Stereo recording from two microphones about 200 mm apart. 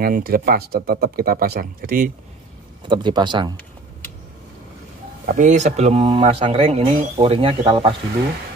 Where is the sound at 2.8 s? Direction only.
25° right (ahead or behind).